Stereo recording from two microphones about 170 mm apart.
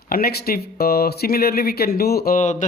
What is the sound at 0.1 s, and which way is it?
Speech, 65° left (ahead or behind).